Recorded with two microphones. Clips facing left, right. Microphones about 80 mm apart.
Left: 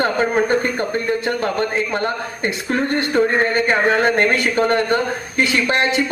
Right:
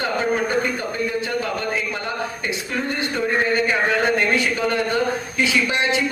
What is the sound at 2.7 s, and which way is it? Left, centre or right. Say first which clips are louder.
A man's voice: left 8 dB; left.